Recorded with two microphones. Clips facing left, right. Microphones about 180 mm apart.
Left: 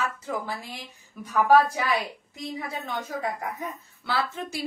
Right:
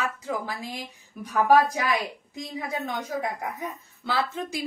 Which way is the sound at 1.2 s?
15° right (ahead or behind).